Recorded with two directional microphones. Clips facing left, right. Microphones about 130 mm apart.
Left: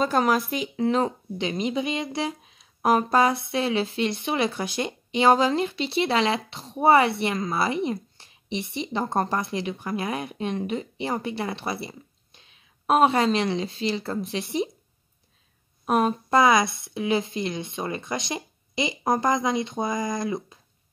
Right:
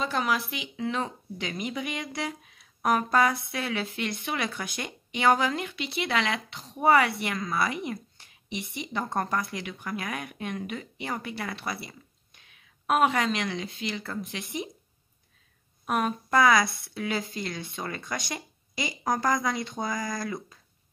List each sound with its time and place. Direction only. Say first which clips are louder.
0.0 s speech: left 6 dB; 45° left (ahead or behind)
1.5 s speech: left 6 dB; 25° left (ahead or behind)
15.8 s speech: left 5 dB; 30° left (ahead or behind)